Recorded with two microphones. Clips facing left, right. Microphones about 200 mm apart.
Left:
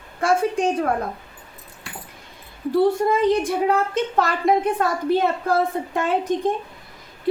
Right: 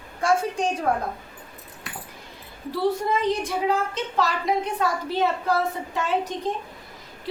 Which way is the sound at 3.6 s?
55° left (ahead or behind).